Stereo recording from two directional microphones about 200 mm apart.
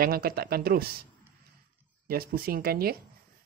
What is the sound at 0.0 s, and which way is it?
Speech, 50° right (ahead or behind).